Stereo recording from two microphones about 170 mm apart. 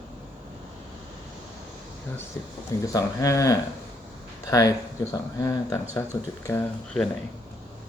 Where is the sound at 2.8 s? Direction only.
20° left (ahead or behind).